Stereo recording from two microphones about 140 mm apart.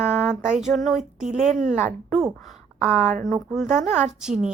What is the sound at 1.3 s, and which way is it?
Speech, 60° right (ahead or behind).